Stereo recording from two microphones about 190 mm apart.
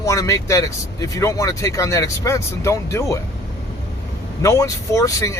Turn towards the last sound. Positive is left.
turn(degrees=15)  # may be behind; listen again after turning